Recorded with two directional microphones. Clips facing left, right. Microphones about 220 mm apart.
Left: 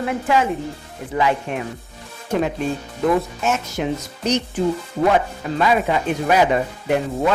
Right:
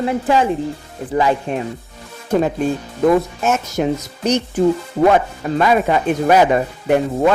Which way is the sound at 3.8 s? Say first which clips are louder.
Right 6 dB; 45° right (ahead or behind).